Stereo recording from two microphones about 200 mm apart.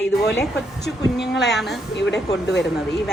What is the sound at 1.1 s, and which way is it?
Speech, 60° left (ahead or behind).